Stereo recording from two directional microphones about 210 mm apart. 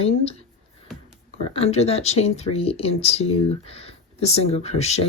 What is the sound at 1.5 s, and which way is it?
Speech, 30° left (ahead or behind).